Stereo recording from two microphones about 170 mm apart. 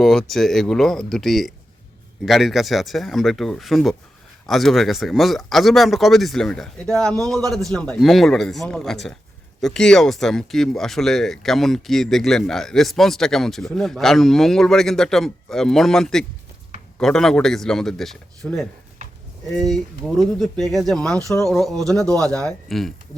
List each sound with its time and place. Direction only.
0.0 s speech: centre (ahead or behind)